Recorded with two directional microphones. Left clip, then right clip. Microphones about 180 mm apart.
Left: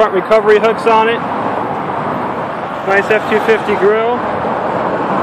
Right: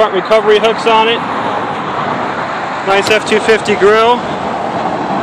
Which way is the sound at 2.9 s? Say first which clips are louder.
Right 1 dB; 25° right (ahead or behind).